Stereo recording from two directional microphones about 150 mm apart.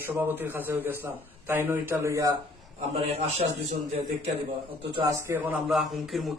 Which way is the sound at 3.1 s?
45° right (ahead or behind).